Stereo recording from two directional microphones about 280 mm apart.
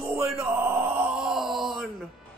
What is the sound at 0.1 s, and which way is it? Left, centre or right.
Speech, centre.